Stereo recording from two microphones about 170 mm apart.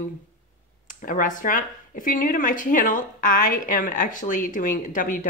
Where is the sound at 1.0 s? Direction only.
50° left (ahead or behind).